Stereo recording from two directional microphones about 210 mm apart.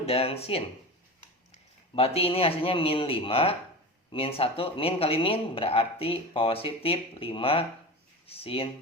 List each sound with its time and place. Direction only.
0.0 s speech: 30° left (ahead or behind)
2.0 s speech: 30° left (ahead or behind)